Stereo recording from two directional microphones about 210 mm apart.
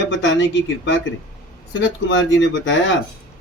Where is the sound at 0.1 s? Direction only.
65° left (ahead or behind).